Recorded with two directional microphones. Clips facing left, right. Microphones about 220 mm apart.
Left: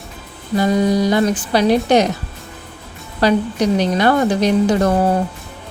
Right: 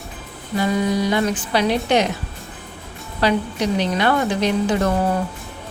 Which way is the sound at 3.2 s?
40° left (ahead or behind).